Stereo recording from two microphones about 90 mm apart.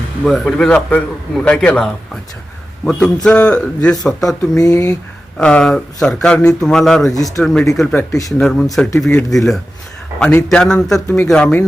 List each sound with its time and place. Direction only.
0.3 s speech: 5° left (ahead or behind)
4.6 s speech: 40° left (ahead or behind)
5.4 s speech: 10° left (ahead or behind)